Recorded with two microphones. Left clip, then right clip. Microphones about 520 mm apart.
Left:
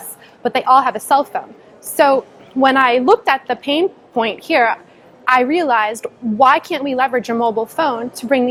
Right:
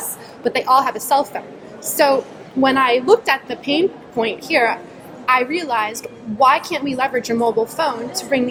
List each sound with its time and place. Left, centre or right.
0.4 s a woman's voice: left